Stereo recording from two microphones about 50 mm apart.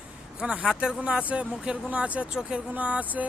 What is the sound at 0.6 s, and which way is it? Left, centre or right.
Speech, centre.